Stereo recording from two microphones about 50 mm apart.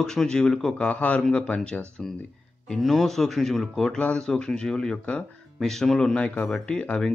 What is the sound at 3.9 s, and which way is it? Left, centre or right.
Speech, centre.